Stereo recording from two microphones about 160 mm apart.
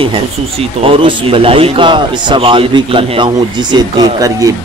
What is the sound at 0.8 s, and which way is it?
Speech, 35° right (ahead or behind).